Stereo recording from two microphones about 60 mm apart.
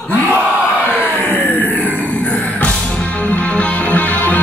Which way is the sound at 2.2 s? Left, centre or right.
Left.